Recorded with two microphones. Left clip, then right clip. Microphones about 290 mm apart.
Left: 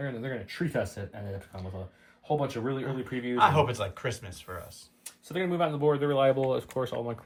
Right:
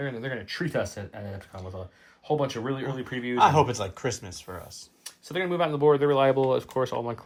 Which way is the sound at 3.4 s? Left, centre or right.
Centre.